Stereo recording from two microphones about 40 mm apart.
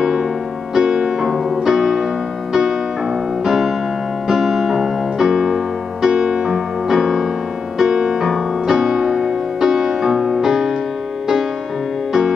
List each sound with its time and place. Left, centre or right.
0.0 s music: centre
3.4 s piano: centre
4.3 s music: centre
6.9 s music: centre